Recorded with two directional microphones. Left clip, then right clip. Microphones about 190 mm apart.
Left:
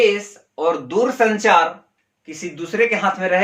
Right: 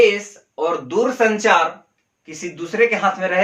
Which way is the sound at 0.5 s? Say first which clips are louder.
Left 1 dB; 25° left (ahead or behind).